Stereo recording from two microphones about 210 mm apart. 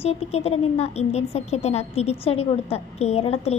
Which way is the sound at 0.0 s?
30° left (ahead or behind).